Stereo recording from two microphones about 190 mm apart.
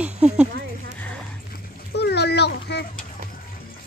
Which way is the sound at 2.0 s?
60° left (ahead or behind).